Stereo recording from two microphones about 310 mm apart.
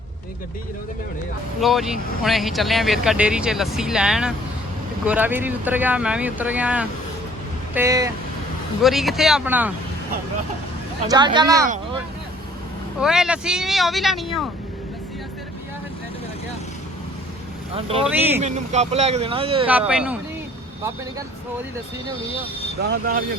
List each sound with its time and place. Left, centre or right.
1.6 s speech: centre
11.1 s speech: centre
13.0 s speech: centre
17.7 s speech: centre
19.6 s speech: centre
22.8 s speech: right